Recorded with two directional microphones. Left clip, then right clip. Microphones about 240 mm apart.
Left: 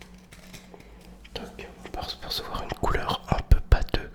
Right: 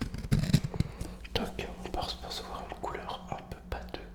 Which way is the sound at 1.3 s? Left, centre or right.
Right.